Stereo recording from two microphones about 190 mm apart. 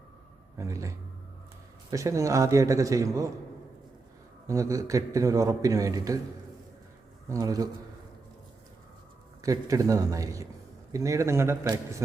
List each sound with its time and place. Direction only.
0.6 s a man's voice: 15° right (ahead or behind)
4.4 s a man's voice: 15° right (ahead or behind)
7.3 s speech: 20° right (ahead or behind)
9.4 s a man's voice: 15° right (ahead or behind)